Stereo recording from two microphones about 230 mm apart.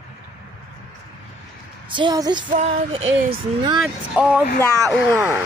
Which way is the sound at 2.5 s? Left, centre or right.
Right.